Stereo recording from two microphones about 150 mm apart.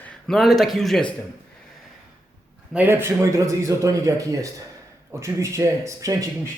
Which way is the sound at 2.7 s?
15° right (ahead or behind).